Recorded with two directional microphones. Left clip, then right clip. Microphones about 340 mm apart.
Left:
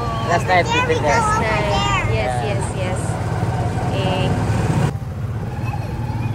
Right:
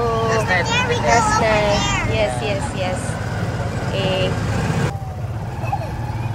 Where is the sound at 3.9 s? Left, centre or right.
Centre.